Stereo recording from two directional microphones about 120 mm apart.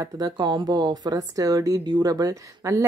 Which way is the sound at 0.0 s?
35° right (ahead or behind).